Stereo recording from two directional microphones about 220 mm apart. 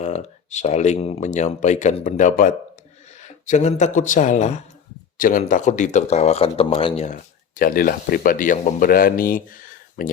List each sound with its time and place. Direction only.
0.0 s speech: 30° left (ahead or behind)